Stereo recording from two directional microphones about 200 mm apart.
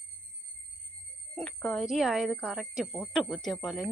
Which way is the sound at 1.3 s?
5° left (ahead or behind).